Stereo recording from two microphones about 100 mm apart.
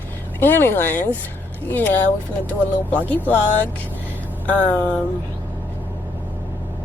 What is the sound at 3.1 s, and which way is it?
Speech, 15° left (ahead or behind).